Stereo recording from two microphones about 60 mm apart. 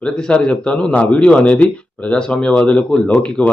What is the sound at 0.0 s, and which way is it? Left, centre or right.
A man's voice, centre.